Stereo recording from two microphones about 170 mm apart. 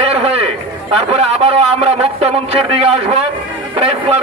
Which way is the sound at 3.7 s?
35° right (ahead or behind).